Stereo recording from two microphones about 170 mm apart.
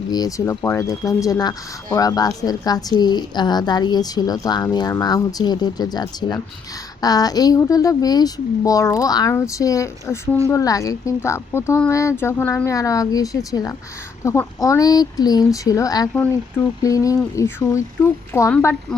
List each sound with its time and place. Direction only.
0.1 s a woman's voice: 20° left (ahead or behind)
16.1 s a woman's voice: 10° left (ahead or behind)
16.8 s a woman's voice: 20° left (ahead or behind)